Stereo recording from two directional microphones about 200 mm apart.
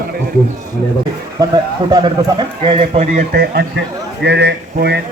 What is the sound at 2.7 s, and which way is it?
Speech, 30° right (ahead or behind).